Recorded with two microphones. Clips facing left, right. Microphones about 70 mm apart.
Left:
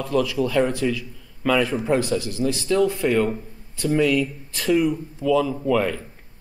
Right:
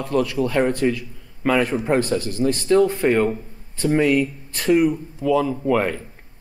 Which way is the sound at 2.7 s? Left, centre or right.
Right.